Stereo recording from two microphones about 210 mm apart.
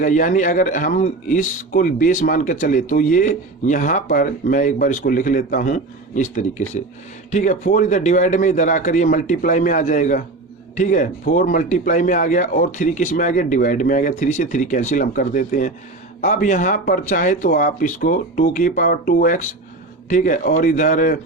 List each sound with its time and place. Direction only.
0.0 s a man's voice: 35° left (ahead or behind)